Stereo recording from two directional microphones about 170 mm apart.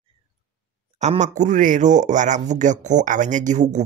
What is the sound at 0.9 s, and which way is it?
Speech, 45° right (ahead or behind).